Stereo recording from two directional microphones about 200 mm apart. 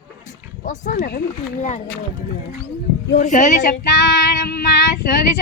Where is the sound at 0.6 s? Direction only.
45° left (ahead or behind).